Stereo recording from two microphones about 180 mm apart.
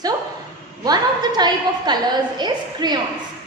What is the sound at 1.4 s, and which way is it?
A woman's voice, 25° right (ahead or behind).